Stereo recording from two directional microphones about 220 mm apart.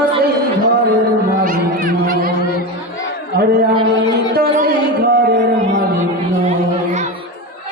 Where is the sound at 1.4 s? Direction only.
40° right (ahead or behind).